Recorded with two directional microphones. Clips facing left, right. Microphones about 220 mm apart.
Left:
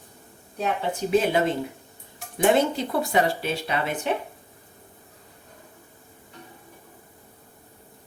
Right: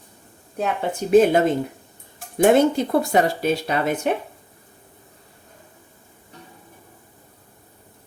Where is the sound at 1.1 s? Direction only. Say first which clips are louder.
Right 7 dB; 45° right (ahead or behind).